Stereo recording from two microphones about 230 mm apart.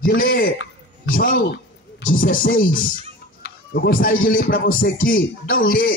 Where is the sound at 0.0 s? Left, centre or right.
Left.